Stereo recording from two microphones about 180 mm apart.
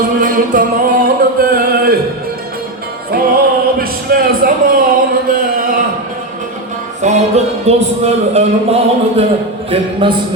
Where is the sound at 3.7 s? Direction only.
55° right (ahead or behind).